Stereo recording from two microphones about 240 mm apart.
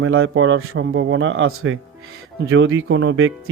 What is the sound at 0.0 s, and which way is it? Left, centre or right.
Speech, right.